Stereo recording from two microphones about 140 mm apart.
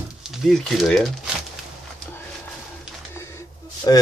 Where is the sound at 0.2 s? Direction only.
Centre (ahead or behind).